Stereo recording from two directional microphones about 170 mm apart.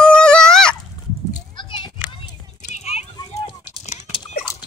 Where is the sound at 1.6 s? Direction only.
30° left (ahead or behind).